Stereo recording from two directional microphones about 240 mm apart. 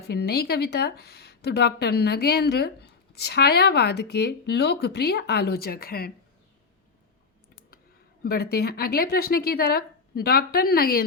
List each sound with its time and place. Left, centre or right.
0.1 s speech: left
8.2 s a woman's voice: left